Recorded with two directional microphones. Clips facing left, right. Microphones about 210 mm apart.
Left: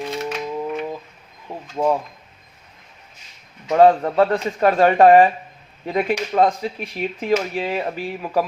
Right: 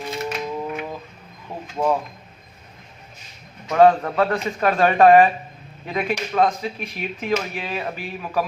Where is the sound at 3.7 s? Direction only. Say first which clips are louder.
Left 1 dB; 25° left (ahead or behind).